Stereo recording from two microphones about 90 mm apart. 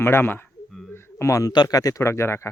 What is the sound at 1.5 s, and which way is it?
Speech, 50° left (ahead or behind).